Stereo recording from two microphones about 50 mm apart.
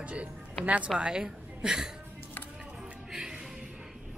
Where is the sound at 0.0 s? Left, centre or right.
Right.